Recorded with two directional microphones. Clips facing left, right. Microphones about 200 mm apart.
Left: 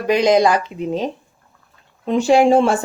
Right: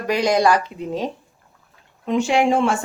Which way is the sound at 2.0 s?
35° left (ahead or behind).